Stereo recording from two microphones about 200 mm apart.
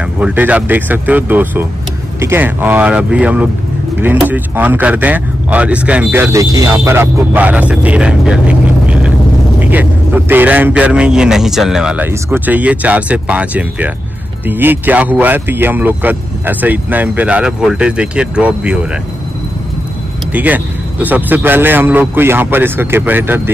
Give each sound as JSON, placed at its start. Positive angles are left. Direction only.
{"t": 0.2, "sound": "speech", "side_deg": -5}
{"t": 20.3, "sound": "speech", "side_deg": -10}